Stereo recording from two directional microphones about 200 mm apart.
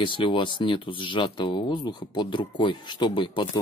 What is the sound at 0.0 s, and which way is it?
Speech, 25° left (ahead or behind).